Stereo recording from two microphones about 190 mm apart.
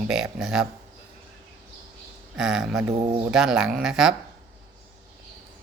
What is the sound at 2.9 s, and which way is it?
Speech, 25° right (ahead or behind).